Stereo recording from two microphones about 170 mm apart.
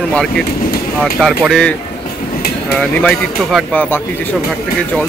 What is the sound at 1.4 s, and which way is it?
Speech, 5° left (ahead or behind).